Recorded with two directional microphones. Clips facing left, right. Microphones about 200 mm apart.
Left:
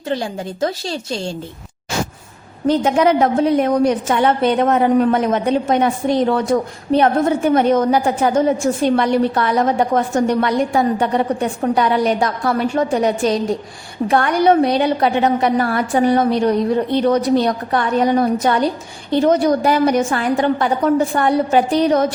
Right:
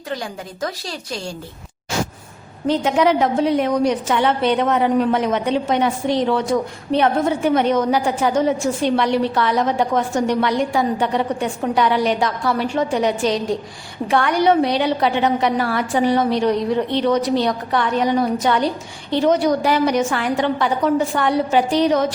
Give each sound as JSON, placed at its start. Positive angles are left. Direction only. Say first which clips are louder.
{"t": 0.1, "sound": "a woman's voice", "louder": "left 6 dB", "side_deg": 25}
{"t": 2.6, "sound": "a woman's voice", "louder": "left 2 dB", "side_deg": 45}